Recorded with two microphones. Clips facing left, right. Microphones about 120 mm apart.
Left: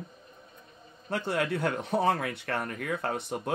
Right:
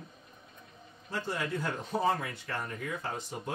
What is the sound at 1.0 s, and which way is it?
Speech, 65° left (ahead or behind).